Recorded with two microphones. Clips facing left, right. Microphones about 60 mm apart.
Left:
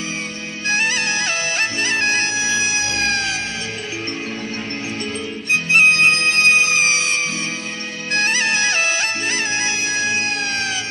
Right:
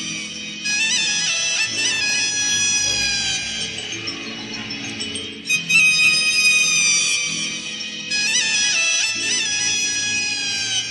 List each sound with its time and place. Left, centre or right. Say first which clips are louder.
0.7 s music: left 4 dB; left
5.5 s music: left 4 dB; left